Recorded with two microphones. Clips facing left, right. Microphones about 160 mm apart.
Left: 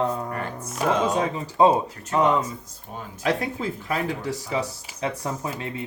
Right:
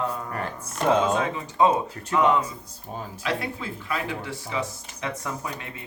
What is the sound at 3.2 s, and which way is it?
Speech, 40° left (ahead or behind).